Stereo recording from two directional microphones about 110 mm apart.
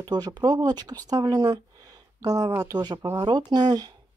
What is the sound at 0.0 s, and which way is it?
Speech, 40° right (ahead or behind).